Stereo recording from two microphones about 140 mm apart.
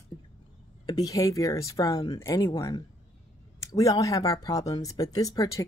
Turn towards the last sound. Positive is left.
turn(degrees=25)  # may be behind; listen again after turning